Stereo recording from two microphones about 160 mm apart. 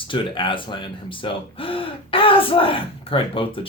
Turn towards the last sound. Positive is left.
turn(degrees=35)  # may be behind; listen again after turning